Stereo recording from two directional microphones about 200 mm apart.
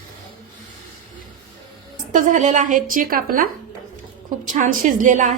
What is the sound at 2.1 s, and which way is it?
A woman's voice, 40° right (ahead or behind).